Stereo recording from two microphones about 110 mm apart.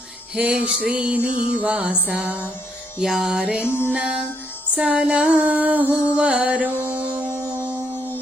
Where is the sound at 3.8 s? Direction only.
10° right (ahead or behind).